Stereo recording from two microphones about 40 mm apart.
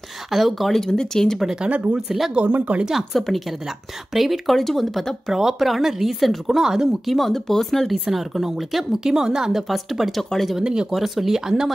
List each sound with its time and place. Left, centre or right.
0.3 s speech: centre
0.7 s speech: centre
2.0 s speech: centre
2.4 s speech: right
2.8 s speech: centre
3.1 s speech: centre
4.5 s speech: centre
5.3 s speech: centre
6.9 s speech: centre
8.1 s speech: centre
10.6 s speech: centre
11.0 s speech: centre